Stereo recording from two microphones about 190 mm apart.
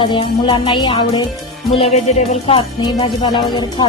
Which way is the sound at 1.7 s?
30° left (ahead or behind).